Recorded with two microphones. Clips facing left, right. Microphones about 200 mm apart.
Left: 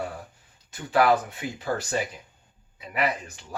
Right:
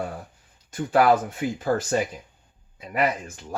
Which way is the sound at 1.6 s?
45° right (ahead or behind).